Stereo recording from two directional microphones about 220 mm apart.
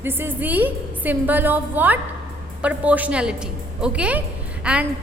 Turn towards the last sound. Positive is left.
turn(degrees=-5)  # may be behind; listen again after turning